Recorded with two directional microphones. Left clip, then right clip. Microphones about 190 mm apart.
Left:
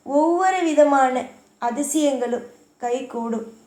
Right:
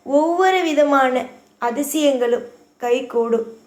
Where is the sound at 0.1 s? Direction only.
30° right (ahead or behind).